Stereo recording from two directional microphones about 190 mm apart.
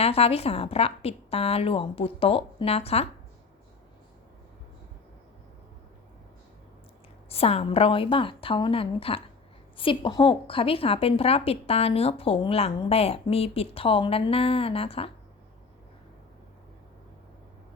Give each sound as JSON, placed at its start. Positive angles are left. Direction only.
{"t": 0.0, "sound": "a woman's voice", "side_deg": 30}
{"t": 7.3, "sound": "a woman's voice", "side_deg": 30}